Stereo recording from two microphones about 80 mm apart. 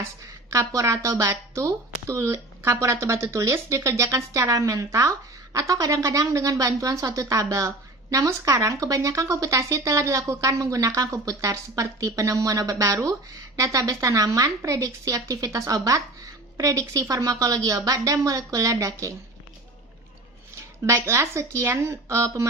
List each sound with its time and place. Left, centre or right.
0.7 s a woman's voice: right
20.8 s speech: right